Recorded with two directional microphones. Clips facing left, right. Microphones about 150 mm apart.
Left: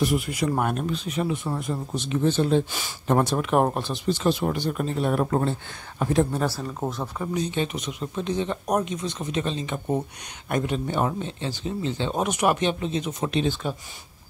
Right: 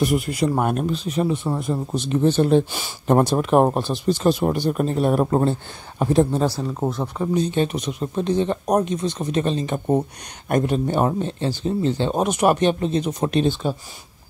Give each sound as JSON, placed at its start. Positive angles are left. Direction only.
{"t": 0.0, "sound": "speech", "side_deg": -50}
{"t": 0.7, "sound": "speech", "side_deg": -40}
{"t": 3.1, "sound": "speech", "side_deg": -35}
{"t": 5.2, "sound": "speech", "side_deg": -30}
{"t": 6.7, "sound": "speech", "side_deg": -15}
{"t": 7.3, "sound": "speech", "side_deg": -35}
{"t": 13.5, "sound": "speech", "side_deg": -30}